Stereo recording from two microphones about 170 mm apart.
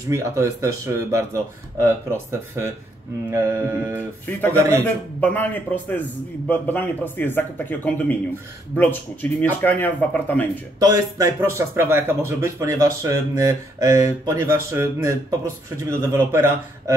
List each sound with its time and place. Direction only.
0.1 s speech: 15° right (ahead or behind)
4.3 s a man's voice: 10° left (ahead or behind)
10.8 s speech: 20° right (ahead or behind)